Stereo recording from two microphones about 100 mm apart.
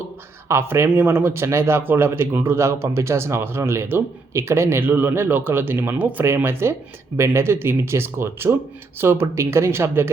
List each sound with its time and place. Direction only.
0.4 s speech: 25° right (ahead or behind)